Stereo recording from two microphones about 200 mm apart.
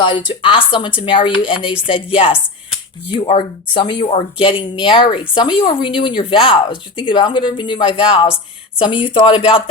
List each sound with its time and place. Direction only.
0.0 s speech: 20° left (ahead or behind)